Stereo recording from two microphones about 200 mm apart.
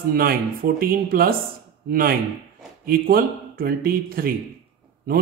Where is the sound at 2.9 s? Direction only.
50° right (ahead or behind).